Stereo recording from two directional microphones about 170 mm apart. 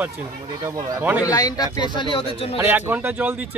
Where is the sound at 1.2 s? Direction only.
20° left (ahead or behind).